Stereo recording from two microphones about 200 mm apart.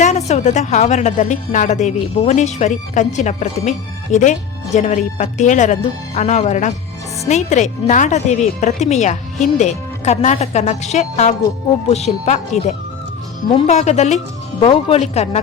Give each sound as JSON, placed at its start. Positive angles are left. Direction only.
{"t": 0.0, "sound": "a woman's voice", "side_deg": 35}